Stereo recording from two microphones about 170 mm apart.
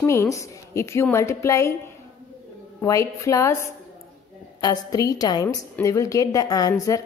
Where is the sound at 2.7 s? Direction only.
20° left (ahead or behind).